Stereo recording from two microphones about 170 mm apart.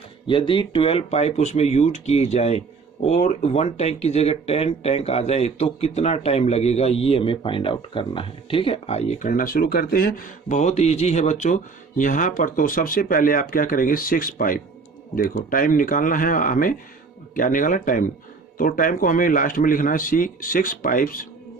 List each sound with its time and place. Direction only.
0.3 s a man's voice: 30° left (ahead or behind); by 21.2 s 55° left (ahead or behind)